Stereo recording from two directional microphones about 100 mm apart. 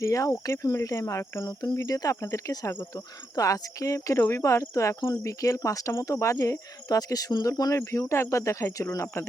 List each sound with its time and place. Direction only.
0.0 s speech: 30° left (ahead or behind)